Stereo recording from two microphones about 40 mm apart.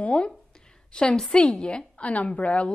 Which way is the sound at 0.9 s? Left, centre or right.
Left.